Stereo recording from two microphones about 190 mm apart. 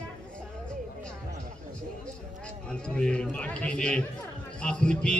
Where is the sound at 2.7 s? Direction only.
5° left (ahead or behind).